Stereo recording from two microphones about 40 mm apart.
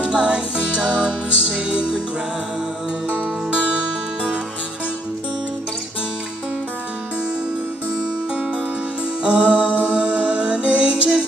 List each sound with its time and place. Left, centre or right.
0.0 s music: right
3.5 s music: right
9.2 s music: right